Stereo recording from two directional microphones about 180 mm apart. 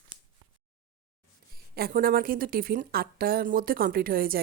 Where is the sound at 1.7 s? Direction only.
55° right (ahead or behind).